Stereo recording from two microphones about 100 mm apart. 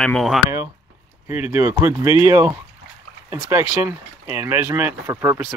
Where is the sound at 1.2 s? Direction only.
20° right (ahead or behind).